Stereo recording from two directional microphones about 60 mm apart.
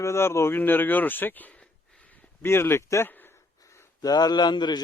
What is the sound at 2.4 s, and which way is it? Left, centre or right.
Speech, left.